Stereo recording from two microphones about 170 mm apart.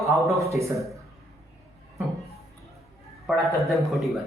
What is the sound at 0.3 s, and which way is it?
Speech, 20° right (ahead or behind).